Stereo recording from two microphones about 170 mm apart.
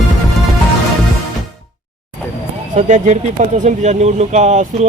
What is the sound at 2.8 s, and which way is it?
Speech, 45° right (ahead or behind).